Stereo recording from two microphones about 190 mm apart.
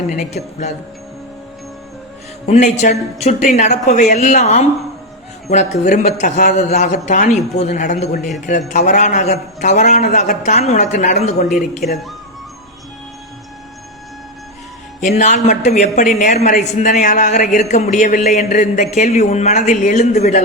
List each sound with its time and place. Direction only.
0.1 s a man's voice: 40° left (ahead or behind)
2.5 s a man's voice: 40° left (ahead or behind)
15.0 s a man's voice: 40° left (ahead or behind)